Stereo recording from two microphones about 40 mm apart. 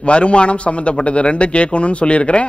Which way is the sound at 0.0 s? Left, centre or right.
Left.